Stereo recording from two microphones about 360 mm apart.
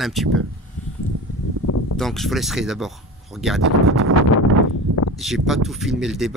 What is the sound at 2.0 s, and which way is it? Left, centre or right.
Speech, centre.